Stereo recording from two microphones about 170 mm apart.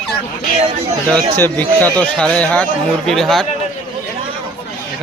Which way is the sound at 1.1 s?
10° left (ahead or behind).